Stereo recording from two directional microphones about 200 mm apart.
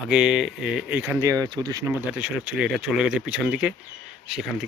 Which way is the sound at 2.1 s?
5° right (ahead or behind).